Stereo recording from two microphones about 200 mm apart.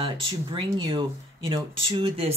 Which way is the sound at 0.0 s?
25° right (ahead or behind).